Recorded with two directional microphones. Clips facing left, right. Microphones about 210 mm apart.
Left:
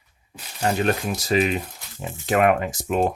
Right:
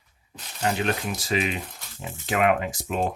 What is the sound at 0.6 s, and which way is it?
Speech, 40° left (ahead or behind).